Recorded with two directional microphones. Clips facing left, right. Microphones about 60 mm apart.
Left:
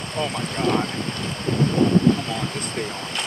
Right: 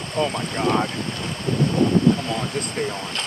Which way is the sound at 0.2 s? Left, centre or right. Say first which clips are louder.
Right 2 dB; centre.